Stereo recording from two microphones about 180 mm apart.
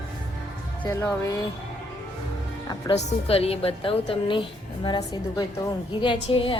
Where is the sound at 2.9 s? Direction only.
35° left (ahead or behind).